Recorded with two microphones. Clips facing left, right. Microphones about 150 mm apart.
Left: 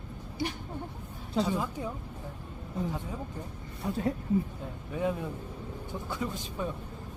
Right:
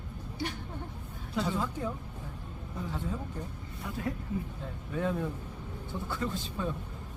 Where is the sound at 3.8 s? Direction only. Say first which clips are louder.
Left 5 dB; 30° left (ahead or behind).